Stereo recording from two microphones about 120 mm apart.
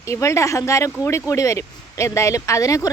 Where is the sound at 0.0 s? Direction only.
25° left (ahead or behind).